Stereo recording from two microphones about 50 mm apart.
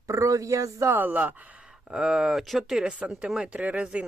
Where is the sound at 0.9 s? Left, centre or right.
Right.